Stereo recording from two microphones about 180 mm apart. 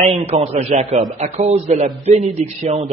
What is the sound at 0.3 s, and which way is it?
Speech, 35° right (ahead or behind).